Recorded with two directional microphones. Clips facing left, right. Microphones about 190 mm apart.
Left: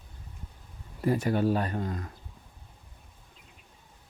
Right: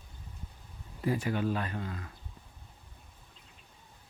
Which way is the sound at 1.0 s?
40° left (ahead or behind).